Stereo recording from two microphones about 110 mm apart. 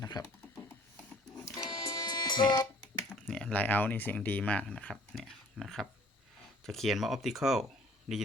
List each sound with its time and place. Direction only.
0.0 s speech: 30° left (ahead or behind)
1.5 s music: 35° left (ahead or behind)
3.2 s speech: 10° left (ahead or behind)
5.1 s a sound: centre (ahead or behind)
6.7 s speech: centre (ahead or behind)